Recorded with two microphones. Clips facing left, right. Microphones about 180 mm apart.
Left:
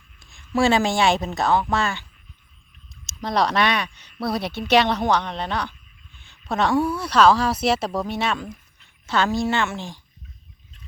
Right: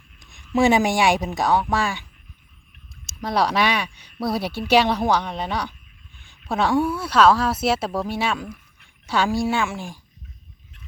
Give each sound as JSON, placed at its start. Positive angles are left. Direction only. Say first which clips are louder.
{"t": 0.2, "sound": "speech", "louder": "right 2 dB", "side_deg": -20}
{"t": 3.2, "sound": "speech", "louder": "even", "side_deg": -5}
{"t": 6.2, "sound": "a sound", "louder": "even", "side_deg": -10}
{"t": 6.7, "sound": "speech", "louder": "even", "side_deg": -5}